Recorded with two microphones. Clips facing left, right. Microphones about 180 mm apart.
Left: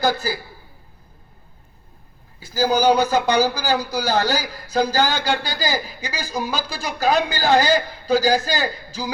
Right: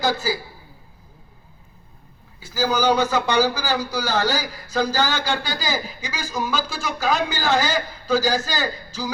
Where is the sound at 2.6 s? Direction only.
40° left (ahead or behind).